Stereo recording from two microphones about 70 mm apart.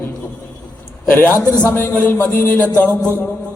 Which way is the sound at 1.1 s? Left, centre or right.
Left.